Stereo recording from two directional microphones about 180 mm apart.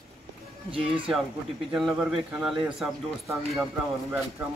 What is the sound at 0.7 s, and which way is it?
Music, 30° right (ahead or behind).